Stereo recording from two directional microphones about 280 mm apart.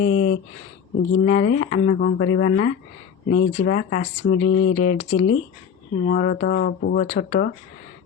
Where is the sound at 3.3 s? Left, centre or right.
Left.